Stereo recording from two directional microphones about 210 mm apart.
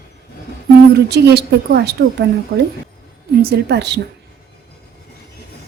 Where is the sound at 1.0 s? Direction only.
50° right (ahead or behind).